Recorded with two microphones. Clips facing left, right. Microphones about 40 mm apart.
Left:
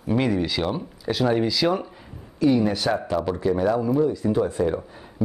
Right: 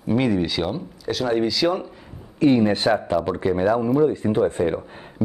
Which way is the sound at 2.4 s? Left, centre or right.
Right.